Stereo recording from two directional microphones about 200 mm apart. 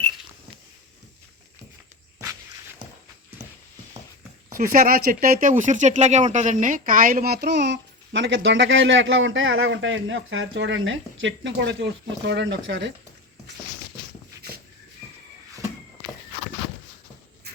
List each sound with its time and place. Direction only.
4.4 s speech: 40° right (ahead or behind); by 12.9 s 65° right (ahead or behind)